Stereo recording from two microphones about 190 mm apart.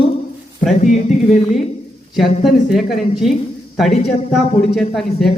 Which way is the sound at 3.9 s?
35° left (ahead or behind).